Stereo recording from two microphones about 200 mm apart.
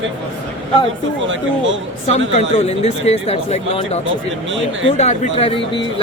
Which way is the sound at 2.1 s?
35° left (ahead or behind).